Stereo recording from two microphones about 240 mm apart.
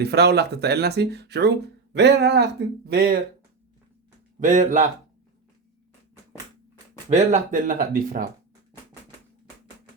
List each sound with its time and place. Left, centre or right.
0.0 s speech: right
4.4 s speech: right
7.1 s speech: right